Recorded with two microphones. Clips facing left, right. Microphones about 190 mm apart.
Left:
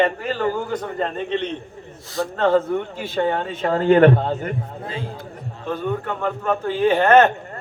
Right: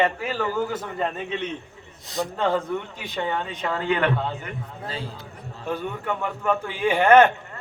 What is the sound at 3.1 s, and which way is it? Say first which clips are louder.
A man's voice: left 6 dB; 45° left (ahead or behind).